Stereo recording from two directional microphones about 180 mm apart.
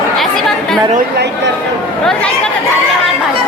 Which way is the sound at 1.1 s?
70° right (ahead or behind).